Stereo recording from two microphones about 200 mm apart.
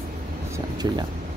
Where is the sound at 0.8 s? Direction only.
20° right (ahead or behind).